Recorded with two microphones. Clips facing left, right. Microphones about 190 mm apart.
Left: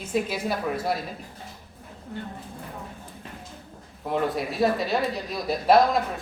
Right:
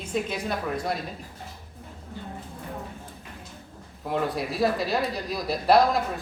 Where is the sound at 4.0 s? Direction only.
Centre (ahead or behind).